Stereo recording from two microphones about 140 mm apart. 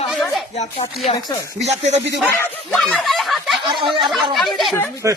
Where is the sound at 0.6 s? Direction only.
45° left (ahead or behind).